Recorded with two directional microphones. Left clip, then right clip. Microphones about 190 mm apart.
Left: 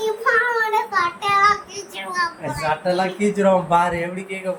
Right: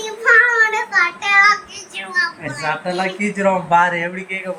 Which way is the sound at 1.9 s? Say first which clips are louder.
Right 4 dB; 15° left (ahead or behind).